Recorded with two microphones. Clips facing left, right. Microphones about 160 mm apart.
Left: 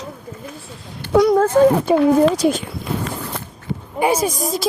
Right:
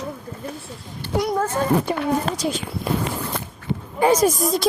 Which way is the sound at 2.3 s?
65° left (ahead or behind).